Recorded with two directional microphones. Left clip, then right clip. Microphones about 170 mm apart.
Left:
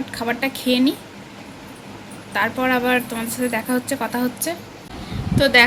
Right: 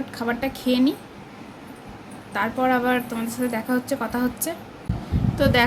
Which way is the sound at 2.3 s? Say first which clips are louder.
Left 2 dB; 10° right (ahead or behind).